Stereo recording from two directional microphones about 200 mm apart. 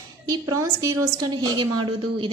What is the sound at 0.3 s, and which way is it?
A woman's voice, 20° right (ahead or behind).